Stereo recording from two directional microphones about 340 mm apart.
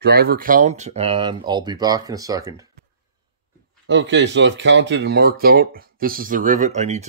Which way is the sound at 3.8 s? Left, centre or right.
Right.